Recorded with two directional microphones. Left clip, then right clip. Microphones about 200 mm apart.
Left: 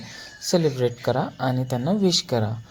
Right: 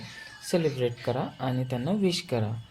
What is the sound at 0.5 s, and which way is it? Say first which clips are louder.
Speech: left 5 dB; 20° left (ahead or behind).